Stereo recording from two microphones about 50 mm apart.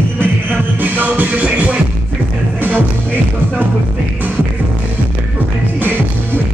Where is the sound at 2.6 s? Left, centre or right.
Right.